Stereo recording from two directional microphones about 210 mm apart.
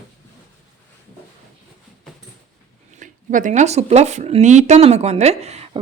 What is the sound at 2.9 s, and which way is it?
Speech, 35° right (ahead or behind).